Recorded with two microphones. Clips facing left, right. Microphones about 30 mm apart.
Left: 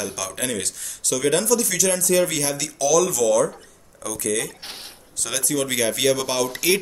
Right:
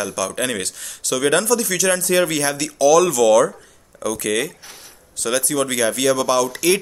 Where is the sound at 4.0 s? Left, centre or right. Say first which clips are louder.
Right 4 dB; right.